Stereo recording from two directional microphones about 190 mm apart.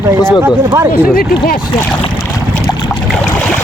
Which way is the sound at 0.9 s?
50° left (ahead or behind).